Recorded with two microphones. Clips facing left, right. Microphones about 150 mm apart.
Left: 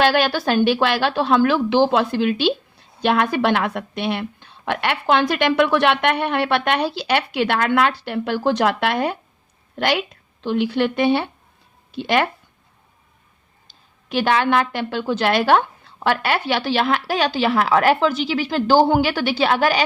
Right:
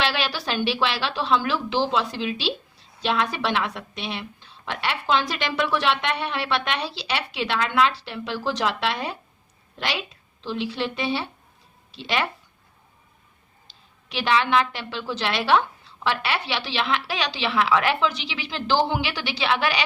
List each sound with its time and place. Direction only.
0.0 s a woman's voice: 50° left (ahead or behind)
13.7 s a woman's voice: 50° left (ahead or behind)